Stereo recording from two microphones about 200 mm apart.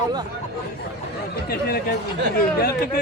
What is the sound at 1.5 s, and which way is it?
Chatter, 50° left (ahead or behind).